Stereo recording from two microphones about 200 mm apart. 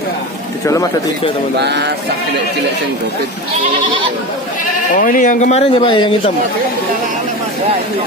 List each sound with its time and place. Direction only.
0.7 s speech: 15° left (ahead or behind)
1.6 s a sound: 55° right (ahead or behind)
4.9 s speech: 45° left (ahead or behind); by 6.3 s 25° left (ahead or behind)